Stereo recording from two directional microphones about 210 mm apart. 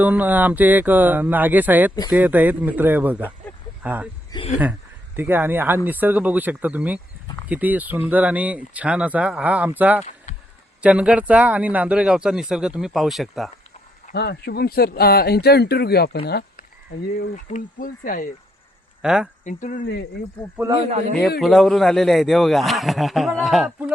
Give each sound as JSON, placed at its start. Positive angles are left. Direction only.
{"t": 0.0, "sound": "speech", "side_deg": -10}
{"t": 4.3, "sound": "speech", "side_deg": 25}
{"t": 5.1, "sound": "speech", "side_deg": -10}
{"t": 10.3, "sound": "a sound", "side_deg": 35}
{"t": 10.8, "sound": "speech", "side_deg": -5}
{"t": 14.1, "sound": "speech", "side_deg": 50}
{"t": 19.0, "sound": "speech", "side_deg": -5}
{"t": 19.5, "sound": "speech", "side_deg": 35}
{"t": 21.1, "sound": "speech", "side_deg": 0}